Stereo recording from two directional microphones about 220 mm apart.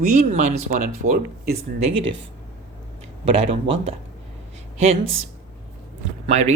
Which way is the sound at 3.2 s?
25° right (ahead or behind).